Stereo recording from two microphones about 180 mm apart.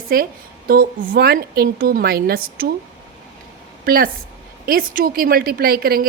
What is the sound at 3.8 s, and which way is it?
A woman's voice, 55° right (ahead or behind).